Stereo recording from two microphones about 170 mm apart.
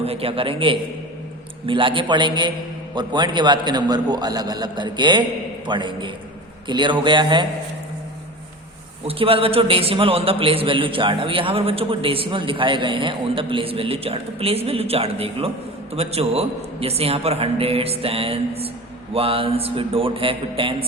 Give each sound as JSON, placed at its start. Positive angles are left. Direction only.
{"t": 0.0, "sound": "a man's voice", "side_deg": -35}
{"t": 9.0, "sound": "a man's voice", "side_deg": -30}